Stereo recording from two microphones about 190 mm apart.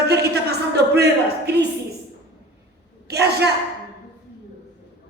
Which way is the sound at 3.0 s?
60° right (ahead or behind).